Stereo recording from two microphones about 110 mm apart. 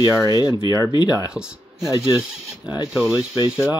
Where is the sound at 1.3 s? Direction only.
5° right (ahead or behind).